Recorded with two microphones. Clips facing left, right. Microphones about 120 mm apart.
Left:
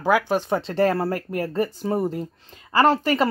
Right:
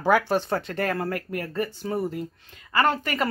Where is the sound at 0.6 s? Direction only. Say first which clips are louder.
Left 6 dB; 30° left (ahead or behind).